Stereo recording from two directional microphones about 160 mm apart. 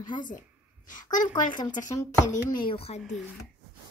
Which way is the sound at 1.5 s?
25° left (ahead or behind).